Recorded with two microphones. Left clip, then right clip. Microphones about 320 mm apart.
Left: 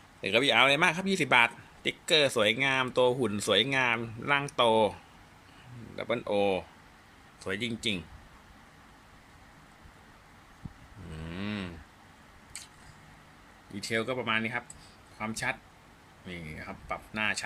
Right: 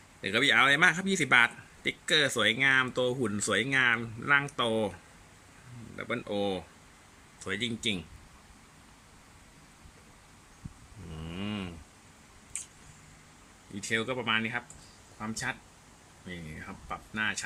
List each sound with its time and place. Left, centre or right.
0.2 s a man's voice: centre
6.0 s a man's voice: centre
11.3 s moo: centre
13.8 s speech: centre